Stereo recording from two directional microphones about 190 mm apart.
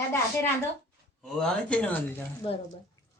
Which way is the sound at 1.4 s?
5° left (ahead or behind).